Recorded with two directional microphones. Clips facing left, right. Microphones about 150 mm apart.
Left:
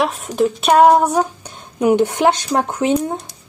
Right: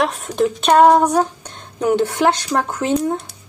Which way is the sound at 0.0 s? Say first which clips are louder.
Left 1 dB; 5° left (ahead or behind).